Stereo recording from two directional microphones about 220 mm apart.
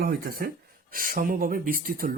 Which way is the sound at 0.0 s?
45° right (ahead or behind).